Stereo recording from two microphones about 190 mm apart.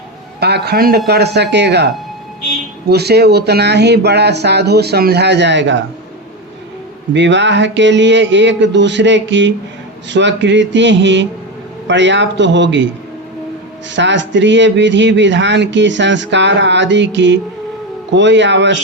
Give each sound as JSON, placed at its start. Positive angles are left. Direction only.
{"t": 0.3, "sound": "speech", "side_deg": -60}
{"t": 2.9, "sound": "speech", "side_deg": -60}
{"t": 7.1, "sound": "a man's voice", "side_deg": -70}
{"t": 13.9, "sound": "a man's voice", "side_deg": -70}